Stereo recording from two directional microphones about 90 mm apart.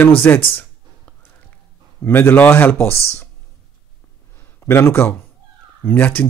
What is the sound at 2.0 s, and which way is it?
A man's voice, 25° left (ahead or behind).